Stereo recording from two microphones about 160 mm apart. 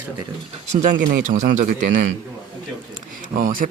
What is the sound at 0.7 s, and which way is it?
Speech, 50° right (ahead or behind).